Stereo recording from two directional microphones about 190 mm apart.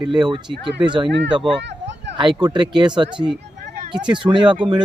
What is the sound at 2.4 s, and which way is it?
Speech, 25° right (ahead or behind).